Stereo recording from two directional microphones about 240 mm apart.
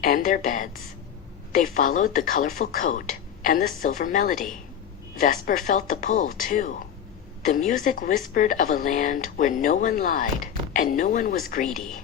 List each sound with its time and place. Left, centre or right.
0.0 s a woman's voice: left